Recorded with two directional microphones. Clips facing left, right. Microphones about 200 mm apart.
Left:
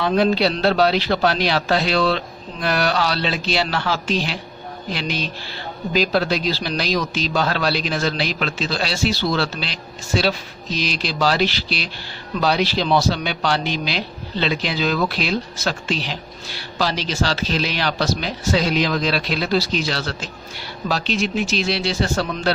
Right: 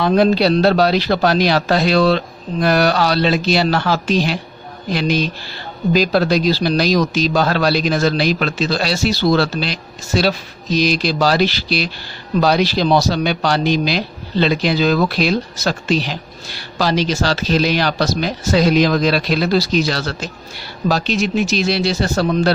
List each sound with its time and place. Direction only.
0.0 s a man's voice: 40° right (ahead or behind)